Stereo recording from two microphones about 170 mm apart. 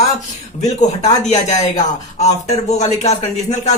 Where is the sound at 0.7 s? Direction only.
45° left (ahead or behind).